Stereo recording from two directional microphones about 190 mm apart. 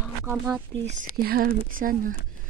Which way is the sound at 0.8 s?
40° right (ahead or behind).